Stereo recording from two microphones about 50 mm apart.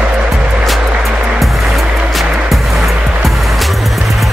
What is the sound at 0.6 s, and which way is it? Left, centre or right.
Music, centre.